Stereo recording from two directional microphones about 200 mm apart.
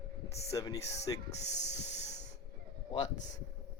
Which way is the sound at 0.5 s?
15° left (ahead or behind).